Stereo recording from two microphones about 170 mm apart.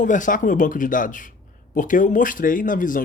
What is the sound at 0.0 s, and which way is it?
Speech, 50° left (ahead or behind).